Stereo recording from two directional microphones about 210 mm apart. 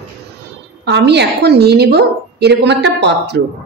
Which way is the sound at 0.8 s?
55° right (ahead or behind).